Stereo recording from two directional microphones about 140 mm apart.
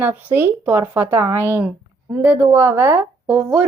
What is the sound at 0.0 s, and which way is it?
Speech, 15° right (ahead or behind).